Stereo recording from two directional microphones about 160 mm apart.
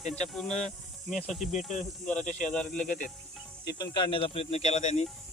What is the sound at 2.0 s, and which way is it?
Speech, 45° left (ahead or behind).